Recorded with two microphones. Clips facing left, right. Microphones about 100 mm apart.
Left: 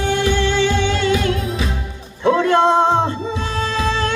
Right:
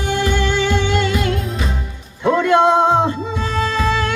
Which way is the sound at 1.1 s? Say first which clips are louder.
Left 2 dB; centre (ahead or behind).